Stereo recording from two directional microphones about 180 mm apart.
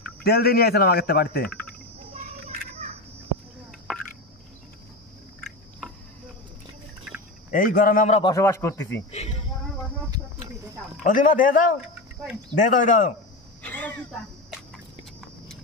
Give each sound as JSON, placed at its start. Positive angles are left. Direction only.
{"t": 0.2, "sound": "a man's voice", "side_deg": 60}
{"t": 5.4, "sound": "a sound", "side_deg": 5}
{"t": 7.5, "sound": "a man's voice", "side_deg": 50}
{"t": 8.2, "sound": "speech", "side_deg": 20}
{"t": 11.1, "sound": "a man's voice", "side_deg": 45}
{"t": 13.6, "sound": "a sound", "side_deg": 10}